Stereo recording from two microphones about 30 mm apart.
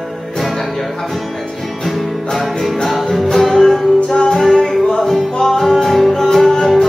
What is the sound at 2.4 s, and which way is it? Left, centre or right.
Music, centre.